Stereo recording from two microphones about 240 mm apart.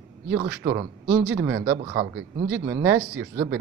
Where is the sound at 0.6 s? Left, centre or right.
Centre.